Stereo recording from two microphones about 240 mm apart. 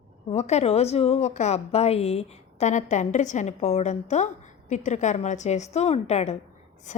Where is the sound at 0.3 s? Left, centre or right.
Left.